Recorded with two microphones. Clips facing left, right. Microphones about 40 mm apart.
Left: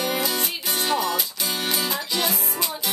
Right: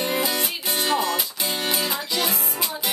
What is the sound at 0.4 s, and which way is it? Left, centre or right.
Music, centre.